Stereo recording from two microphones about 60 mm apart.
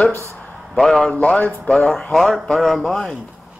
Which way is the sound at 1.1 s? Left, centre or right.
Left.